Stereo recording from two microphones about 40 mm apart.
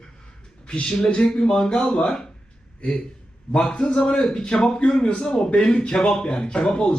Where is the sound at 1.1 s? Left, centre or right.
Left.